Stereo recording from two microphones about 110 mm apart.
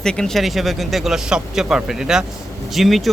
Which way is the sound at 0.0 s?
5° left (ahead or behind).